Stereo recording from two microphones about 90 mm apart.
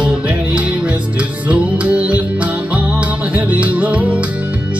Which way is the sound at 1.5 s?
15° right (ahead or behind).